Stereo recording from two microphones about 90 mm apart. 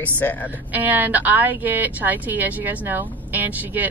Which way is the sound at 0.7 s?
20° right (ahead or behind).